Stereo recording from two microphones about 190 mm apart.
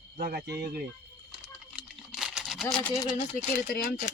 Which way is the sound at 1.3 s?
5° right (ahead or behind).